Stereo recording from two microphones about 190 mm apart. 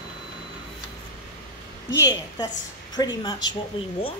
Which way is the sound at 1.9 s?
20° left (ahead or behind).